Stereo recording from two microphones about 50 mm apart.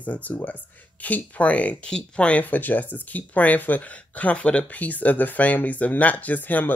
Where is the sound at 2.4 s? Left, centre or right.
Left.